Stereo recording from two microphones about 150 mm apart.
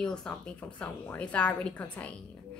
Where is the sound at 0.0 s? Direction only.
5° left (ahead or behind).